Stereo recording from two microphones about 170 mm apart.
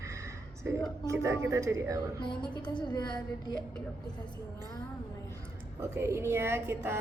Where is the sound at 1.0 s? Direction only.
15° right (ahead or behind).